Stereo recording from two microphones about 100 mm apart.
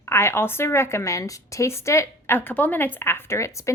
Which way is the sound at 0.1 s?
25° left (ahead or behind).